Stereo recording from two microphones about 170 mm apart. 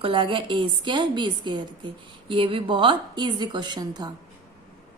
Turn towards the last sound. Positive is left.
turn(degrees=-25)  # may be behind; listen again after turning